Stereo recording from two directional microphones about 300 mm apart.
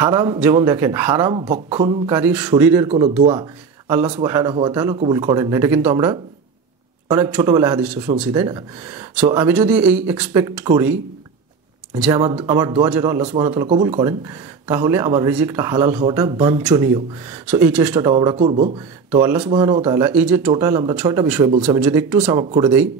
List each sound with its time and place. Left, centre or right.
0.0 s speech: centre
4.2 s speech: centre
18.1 s speech: centre
19.2 s speech: centre
22.2 s speech: centre